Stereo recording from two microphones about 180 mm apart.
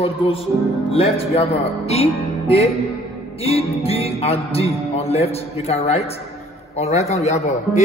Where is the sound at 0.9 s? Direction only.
35° left (ahead or behind).